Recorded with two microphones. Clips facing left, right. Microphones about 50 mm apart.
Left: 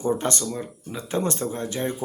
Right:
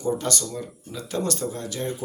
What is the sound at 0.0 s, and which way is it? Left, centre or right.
Speech, left.